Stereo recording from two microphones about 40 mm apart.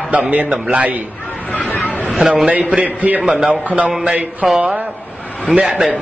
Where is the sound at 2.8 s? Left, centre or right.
Right.